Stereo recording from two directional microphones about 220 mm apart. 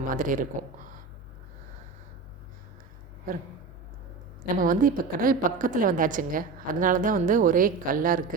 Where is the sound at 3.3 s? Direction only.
40° right (ahead or behind).